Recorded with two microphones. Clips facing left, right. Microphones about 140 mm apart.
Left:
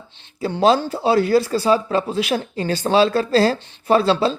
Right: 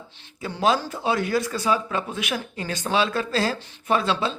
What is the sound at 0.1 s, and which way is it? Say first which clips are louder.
Speech: left 10 dB; 25° left (ahead or behind).